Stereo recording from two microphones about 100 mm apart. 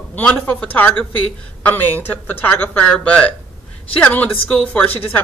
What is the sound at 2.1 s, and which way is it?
Speech, 20° left (ahead or behind).